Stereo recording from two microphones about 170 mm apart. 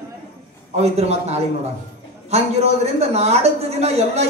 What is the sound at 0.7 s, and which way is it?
Speech, 40° right (ahead or behind).